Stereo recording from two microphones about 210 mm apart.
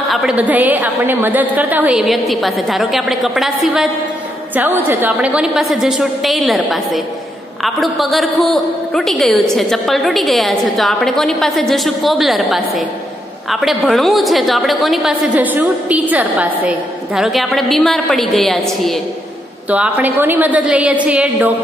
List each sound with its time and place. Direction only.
0.1 s a woman's voice: 5° right (ahead or behind)